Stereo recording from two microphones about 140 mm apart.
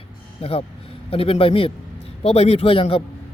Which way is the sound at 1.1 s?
45° left (ahead or behind).